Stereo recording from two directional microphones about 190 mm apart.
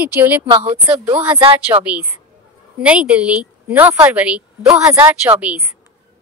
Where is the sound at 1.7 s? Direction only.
30° right (ahead or behind).